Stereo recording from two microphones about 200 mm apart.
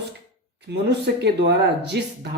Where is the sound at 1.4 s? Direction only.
60° right (ahead or behind).